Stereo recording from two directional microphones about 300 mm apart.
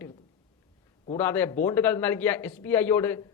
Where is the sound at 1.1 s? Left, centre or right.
Centre.